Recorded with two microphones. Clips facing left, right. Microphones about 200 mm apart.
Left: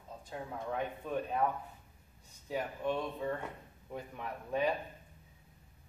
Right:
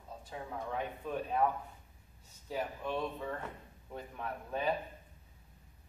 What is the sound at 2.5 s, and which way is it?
Speech, centre (ahead or behind).